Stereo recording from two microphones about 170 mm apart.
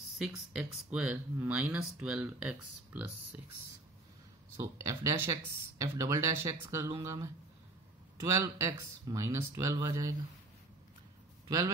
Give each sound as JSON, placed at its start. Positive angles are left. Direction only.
{"t": 0.2, "sound": "speech", "side_deg": -5}
{"t": 4.6, "sound": "speech", "side_deg": -15}
{"t": 8.4, "sound": "speech", "side_deg": -15}
{"t": 11.4, "sound": "a man's voice", "side_deg": -20}